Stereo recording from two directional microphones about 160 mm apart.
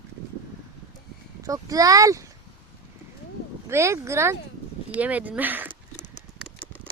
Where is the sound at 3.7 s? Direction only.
20° right (ahead or behind).